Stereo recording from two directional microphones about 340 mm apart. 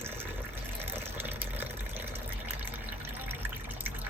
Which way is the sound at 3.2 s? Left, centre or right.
Centre.